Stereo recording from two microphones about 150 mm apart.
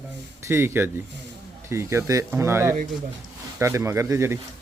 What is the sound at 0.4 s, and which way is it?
Speech, 15° right (ahead or behind).